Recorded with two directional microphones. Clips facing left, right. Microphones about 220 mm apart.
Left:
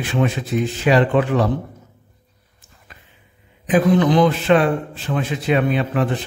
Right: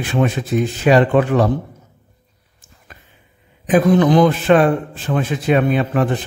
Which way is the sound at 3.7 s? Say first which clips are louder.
Right 2 dB; 45° right (ahead or behind).